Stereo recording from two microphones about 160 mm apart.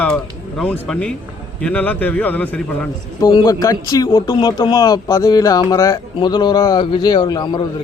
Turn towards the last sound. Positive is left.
turn(degrees=25)  # may be behind; listen again after turning